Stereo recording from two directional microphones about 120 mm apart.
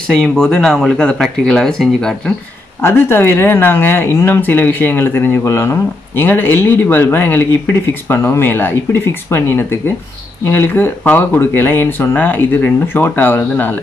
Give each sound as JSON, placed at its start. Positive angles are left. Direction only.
{"t": 0.0, "sound": "speech", "side_deg": 5}
{"t": 2.8, "sound": "speech", "side_deg": 20}